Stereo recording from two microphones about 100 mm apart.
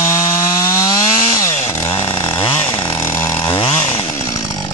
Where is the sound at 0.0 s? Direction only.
35° left (ahead or behind).